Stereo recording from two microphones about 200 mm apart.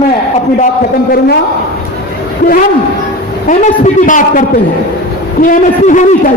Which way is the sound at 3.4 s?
40° left (ahead or behind).